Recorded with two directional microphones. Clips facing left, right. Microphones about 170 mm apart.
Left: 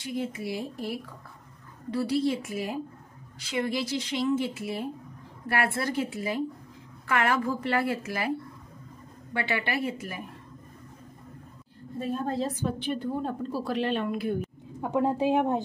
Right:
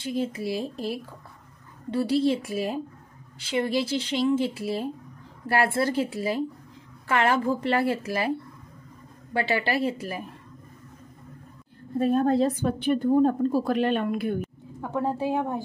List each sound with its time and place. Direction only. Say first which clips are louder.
0.0 s a woman's voice: right 4 dB; 30° right (ahead or behind)
12.0 s a woman's voice: right 8 dB; 60° right (ahead or behind)
14.8 s a woman's voice: left 2 dB; 15° left (ahead or behind)